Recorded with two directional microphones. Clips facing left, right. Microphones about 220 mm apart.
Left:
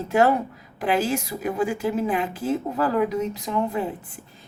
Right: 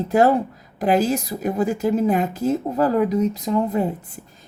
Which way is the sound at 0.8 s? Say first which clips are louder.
Right 4 dB; 40° right (ahead or behind).